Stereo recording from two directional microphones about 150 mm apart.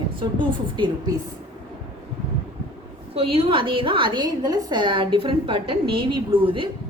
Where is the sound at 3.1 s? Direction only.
40° right (ahead or behind).